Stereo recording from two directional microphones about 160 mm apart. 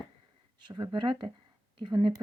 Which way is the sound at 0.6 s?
25° right (ahead or behind).